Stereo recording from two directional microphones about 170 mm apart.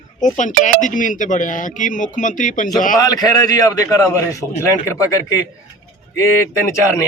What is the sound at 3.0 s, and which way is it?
A man's voice, 20° left (ahead or behind).